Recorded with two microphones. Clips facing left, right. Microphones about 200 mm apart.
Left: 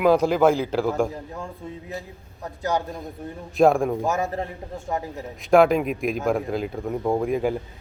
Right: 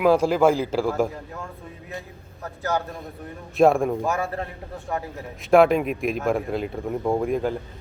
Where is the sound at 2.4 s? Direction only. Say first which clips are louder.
Left 1 dB; 15° left (ahead or behind).